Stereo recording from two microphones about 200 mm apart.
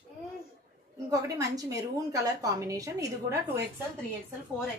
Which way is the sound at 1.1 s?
15° right (ahead or behind).